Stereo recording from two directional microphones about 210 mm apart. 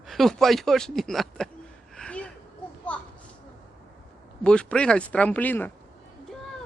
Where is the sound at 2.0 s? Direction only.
5° left (ahead or behind).